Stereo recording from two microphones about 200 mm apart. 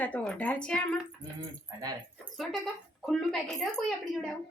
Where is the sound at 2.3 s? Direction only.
Centre (ahead or behind).